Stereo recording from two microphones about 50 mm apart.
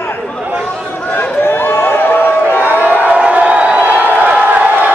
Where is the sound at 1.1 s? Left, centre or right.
Left.